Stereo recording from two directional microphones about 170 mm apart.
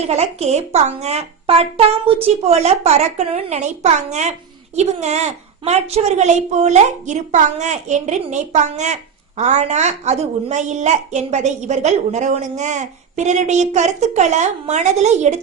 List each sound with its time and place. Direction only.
0.0 s a woman's voice: 40° right (ahead or behind)